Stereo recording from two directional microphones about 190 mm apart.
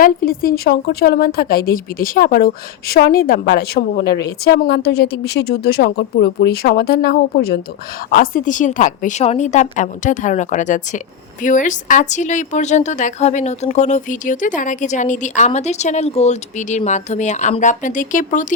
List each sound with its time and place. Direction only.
0.0 s a woman's voice: 50° left (ahead or behind)